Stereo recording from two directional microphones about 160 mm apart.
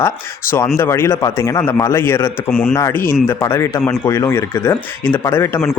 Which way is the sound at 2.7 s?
20° left (ahead or behind).